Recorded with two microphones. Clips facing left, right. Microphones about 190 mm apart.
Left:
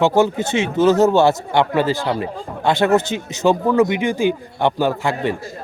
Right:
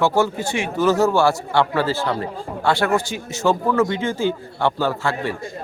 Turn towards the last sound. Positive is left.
turn(degrees=15)  # may be behind; listen again after turning